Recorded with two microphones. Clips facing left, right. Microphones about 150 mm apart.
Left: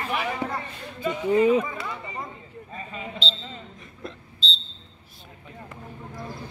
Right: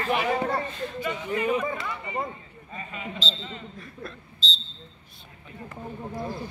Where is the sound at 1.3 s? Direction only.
30° left (ahead or behind).